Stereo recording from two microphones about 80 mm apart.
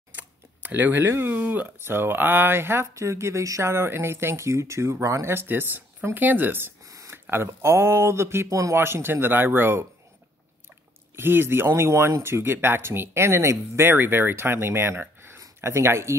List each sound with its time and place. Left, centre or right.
0.1 s camera: right
1.4 s speech: right
8.7 s speech: right
11.1 s speech: right